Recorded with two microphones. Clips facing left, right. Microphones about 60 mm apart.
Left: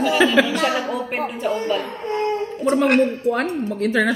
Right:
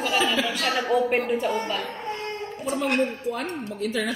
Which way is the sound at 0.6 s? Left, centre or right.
Centre.